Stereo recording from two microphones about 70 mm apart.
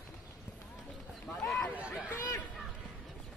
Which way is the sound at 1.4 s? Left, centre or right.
Centre.